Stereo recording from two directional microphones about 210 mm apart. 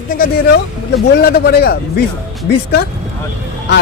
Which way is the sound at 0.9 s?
50° left (ahead or behind).